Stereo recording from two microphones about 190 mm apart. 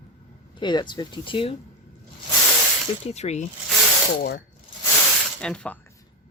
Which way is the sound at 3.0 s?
35° left (ahead or behind).